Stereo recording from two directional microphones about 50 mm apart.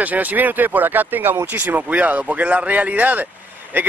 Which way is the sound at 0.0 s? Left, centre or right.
Right.